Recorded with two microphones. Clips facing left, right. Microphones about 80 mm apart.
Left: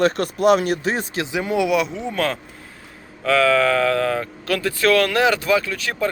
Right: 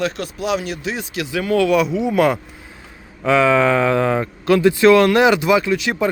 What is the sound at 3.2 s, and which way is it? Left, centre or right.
Speech, centre.